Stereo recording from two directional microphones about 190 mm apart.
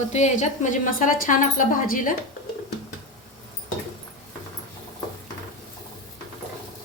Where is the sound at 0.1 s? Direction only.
40° left (ahead or behind).